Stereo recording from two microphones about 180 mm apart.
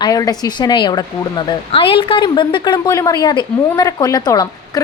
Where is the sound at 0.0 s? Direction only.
20° left (ahead or behind).